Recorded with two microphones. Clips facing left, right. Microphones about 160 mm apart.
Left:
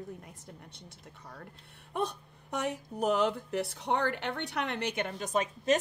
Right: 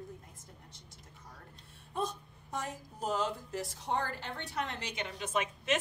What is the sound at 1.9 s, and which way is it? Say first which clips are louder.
A woman's voice: left 3 dB; 65° left (ahead or behind).